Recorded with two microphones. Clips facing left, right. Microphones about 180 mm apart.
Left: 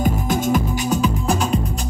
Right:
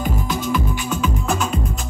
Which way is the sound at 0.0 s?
45° left (ahead or behind).